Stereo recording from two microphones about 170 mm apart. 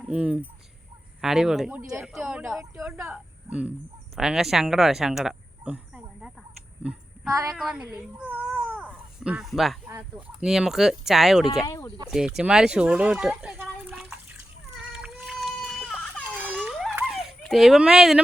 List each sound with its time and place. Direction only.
0.0 s speech: 5° right (ahead or behind)
7.3 s a woman's voice: 20° right (ahead or behind)
7.5 s speech: 5° right (ahead or behind)
11.6 s speech: 20° left (ahead or behind)
12.4 s speech: 5° right (ahead or behind)
14.9 s baby cry: 5° right (ahead or behind)
16.2 s a sound: 10° right (ahead or behind)
16.6 s a sound: centre (ahead or behind)
17.1 s dog: centre (ahead or behind)